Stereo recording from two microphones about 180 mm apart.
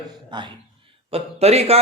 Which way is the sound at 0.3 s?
25° right (ahead or behind).